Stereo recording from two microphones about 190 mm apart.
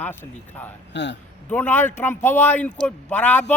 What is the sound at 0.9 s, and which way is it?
Speech, 65° left (ahead or behind).